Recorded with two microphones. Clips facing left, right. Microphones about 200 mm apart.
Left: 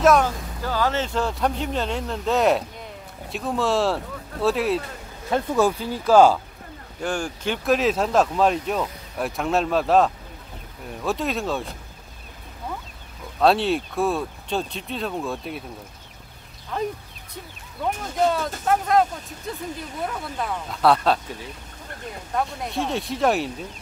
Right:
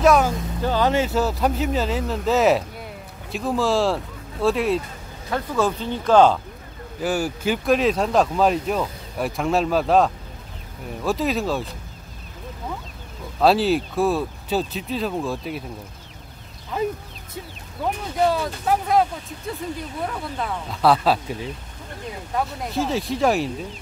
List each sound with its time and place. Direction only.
0.0 s speech: centre (ahead or behind)
0.6 s speech: 20° right (ahead or behind)
1.0 s speech: 5° right (ahead or behind)
7.0 s speech: 5° right (ahead or behind)
13.4 s speech: centre (ahead or behind)
16.7 s speech: 5° right (ahead or behind)
18.3 s speech: 5° right (ahead or behind)
20.1 s speech: centre (ahead or behind)
22.3 s speech: centre (ahead or behind)